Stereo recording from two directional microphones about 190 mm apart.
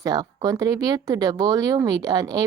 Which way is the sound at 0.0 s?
20° right (ahead or behind).